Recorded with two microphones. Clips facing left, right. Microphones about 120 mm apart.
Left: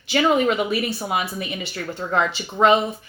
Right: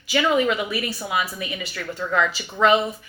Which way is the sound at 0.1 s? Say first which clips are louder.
Left 2 dB; 30° left (ahead or behind).